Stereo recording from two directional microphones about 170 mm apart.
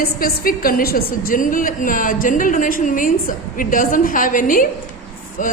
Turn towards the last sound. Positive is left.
turn(degrees=50)  # may be behind; listen again after turning